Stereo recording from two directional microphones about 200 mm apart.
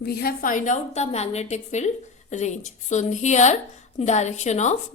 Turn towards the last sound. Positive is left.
turn(degrees=35)  # may be behind; listen again after turning